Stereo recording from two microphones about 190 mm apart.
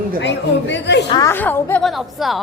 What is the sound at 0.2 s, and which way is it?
Speech, 70° left (ahead or behind).